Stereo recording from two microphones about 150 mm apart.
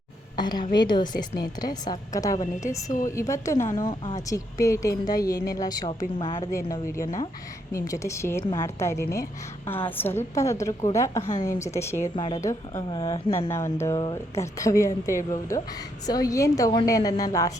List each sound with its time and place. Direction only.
0.3 s a woman's voice: 30° left (ahead or behind)
6.4 s a woman's voice: 20° left (ahead or behind)
12.1 s a woman's voice: 35° left (ahead or behind)
12.4 s a woman's voice: 20° left (ahead or behind)
13.5 s a woman's voice: 20° left (ahead or behind)